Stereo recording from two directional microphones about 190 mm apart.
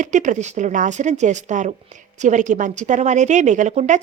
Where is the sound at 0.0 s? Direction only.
40° right (ahead or behind).